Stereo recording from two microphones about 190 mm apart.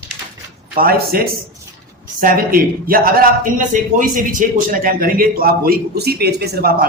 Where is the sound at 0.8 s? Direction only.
50° right (ahead or behind).